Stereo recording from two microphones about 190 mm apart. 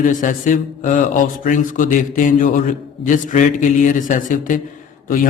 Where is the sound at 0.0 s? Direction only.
45° left (ahead or behind).